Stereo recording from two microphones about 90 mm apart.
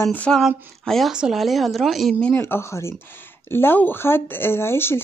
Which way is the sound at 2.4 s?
30° left (ahead or behind).